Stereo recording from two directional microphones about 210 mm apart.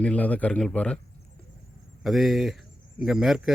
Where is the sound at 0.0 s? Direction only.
5° left (ahead or behind).